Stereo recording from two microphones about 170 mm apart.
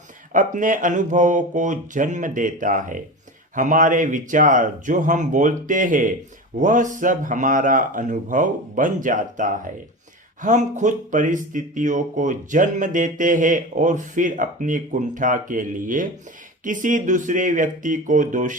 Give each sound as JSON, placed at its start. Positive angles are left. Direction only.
{"t": 0.3, "sound": "speech", "side_deg": -50}